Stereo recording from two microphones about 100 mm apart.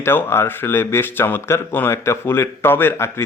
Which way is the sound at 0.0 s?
25° left (ahead or behind).